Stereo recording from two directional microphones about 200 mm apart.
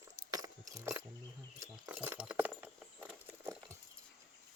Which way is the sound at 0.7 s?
15° right (ahead or behind).